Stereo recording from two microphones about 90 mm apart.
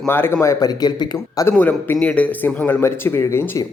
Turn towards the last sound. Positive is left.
turn(degrees=30)  # may be behind; listen again after turning